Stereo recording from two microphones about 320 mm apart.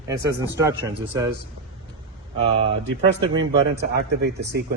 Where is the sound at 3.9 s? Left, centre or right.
Right.